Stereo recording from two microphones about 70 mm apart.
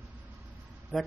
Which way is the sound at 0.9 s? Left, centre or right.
Centre.